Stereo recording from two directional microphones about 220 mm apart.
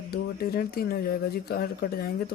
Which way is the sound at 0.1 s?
45° left (ahead or behind).